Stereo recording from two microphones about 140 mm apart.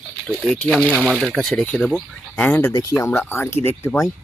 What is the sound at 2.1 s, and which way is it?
Speech, 10° left (ahead or behind).